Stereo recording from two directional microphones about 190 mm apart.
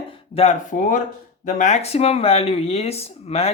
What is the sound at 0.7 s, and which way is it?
Speech, 45° left (ahead or behind).